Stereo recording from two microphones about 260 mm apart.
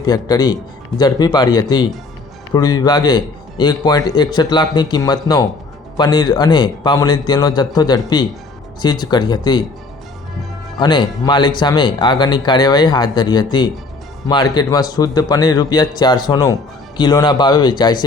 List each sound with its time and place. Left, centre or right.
0.0 s a man's voice: centre
10.8 s a man's voice: centre